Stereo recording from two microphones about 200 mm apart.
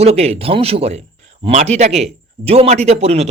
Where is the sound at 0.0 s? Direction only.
30° right (ahead or behind).